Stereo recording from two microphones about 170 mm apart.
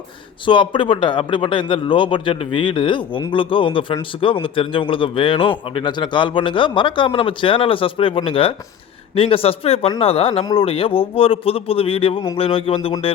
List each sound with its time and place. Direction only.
0.4 s a man's voice: 30° left (ahead or behind)